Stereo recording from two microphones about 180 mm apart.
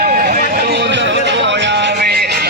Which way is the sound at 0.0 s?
50° right (ahead or behind).